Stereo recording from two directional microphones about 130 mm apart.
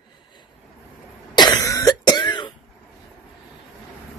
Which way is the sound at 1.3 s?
30° left (ahead or behind).